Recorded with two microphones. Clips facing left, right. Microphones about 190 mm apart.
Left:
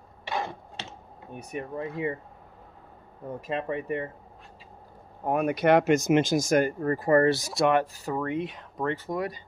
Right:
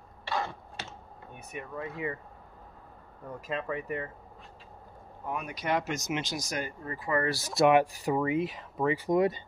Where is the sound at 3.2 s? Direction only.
25° left (ahead or behind).